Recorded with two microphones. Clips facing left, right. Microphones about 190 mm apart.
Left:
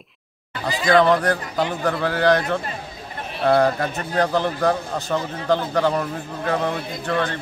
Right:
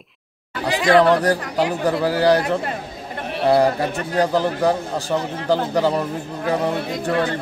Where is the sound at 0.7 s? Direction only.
75° right (ahead or behind).